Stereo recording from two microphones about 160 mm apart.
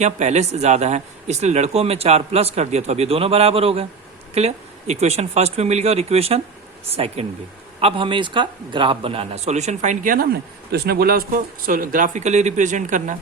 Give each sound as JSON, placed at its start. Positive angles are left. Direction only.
{"t": 0.0, "sound": "a man's voice", "side_deg": -45}
{"t": 10.7, "sound": "speech", "side_deg": -85}